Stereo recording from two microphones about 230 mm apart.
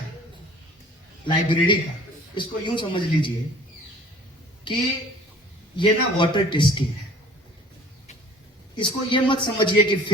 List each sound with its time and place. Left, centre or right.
1.2 s a man's voice: left
4.7 s a man's voice: centre
8.7 s a man's voice: left